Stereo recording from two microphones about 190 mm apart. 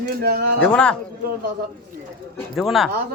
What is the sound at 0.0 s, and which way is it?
Speech, 55° right (ahead or behind).